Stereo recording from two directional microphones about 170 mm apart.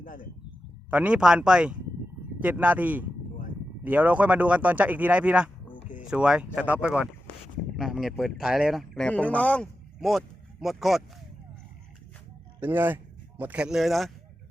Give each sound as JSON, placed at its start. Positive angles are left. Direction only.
{"t": 0.0, "sound": "speech", "side_deg": 55}
{"t": 0.9, "sound": "speech", "side_deg": -5}
{"t": 12.5, "sound": "speech", "side_deg": -10}